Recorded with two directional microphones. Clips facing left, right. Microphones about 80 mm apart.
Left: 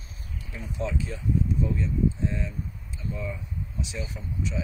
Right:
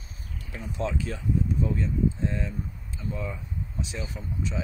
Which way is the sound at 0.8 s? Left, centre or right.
Right.